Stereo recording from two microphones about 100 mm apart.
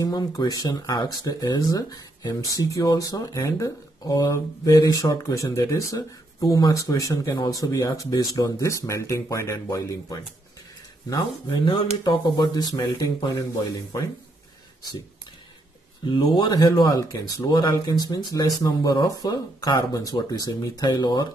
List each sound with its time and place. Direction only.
0.0 s speech: 40° left (ahead or behind)
11.4 s speech: 55° left (ahead or behind)
16.1 s speech: 50° left (ahead or behind)